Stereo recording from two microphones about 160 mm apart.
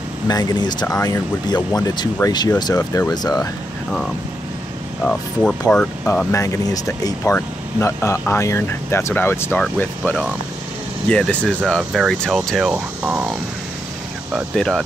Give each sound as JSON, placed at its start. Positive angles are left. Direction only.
{"t": 0.3, "sound": "speech", "side_deg": 25}
{"t": 5.0, "sound": "speech", "side_deg": 5}
{"t": 6.3, "sound": "speech", "side_deg": 20}
{"t": 14.3, "sound": "speech", "side_deg": 5}